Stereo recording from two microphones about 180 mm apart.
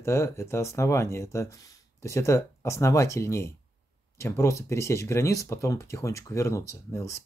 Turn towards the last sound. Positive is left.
turn(degrees=15)  # may be behind; listen again after turning